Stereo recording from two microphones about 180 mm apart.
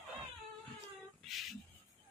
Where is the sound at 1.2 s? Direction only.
Centre (ahead or behind).